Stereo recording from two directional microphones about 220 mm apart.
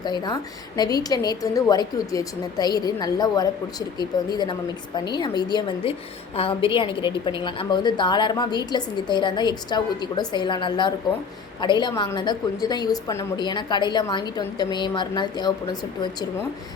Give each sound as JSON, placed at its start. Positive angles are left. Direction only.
{"t": 0.0, "sound": "a woman's voice", "side_deg": 20}